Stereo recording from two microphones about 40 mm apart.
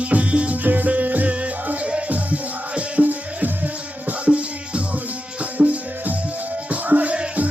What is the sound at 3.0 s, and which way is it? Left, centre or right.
Music, right.